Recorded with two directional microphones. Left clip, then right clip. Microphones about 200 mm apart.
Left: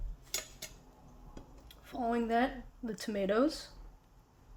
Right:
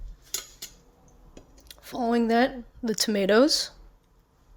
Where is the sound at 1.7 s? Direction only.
45° right (ahead or behind).